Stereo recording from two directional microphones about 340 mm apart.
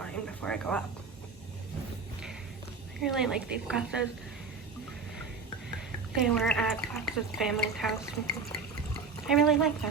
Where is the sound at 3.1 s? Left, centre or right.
Centre.